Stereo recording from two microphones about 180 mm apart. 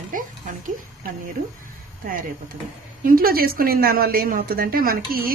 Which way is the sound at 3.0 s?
55° right (ahead or behind).